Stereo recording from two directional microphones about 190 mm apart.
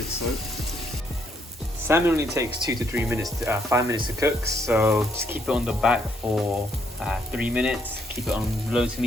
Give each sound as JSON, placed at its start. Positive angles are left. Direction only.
{"t": 1.9, "sound": "speech", "side_deg": -15}